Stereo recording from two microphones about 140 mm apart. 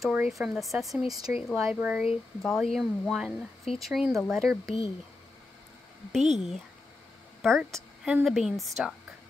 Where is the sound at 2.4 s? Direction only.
Centre (ahead or behind).